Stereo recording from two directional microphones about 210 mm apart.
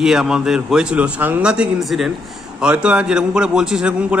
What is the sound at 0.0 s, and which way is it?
A man's voice, 5° right (ahead or behind).